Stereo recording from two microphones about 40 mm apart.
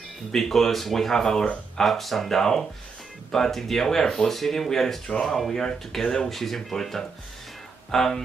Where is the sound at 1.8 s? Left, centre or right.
Centre.